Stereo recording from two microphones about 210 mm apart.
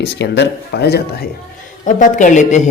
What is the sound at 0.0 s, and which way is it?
Speech, 55° left (ahead or behind).